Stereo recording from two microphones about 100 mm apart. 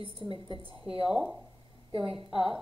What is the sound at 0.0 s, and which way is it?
A woman's voice, 65° right (ahead or behind).